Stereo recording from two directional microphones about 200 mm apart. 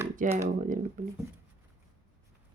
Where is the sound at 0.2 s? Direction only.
40° right (ahead or behind).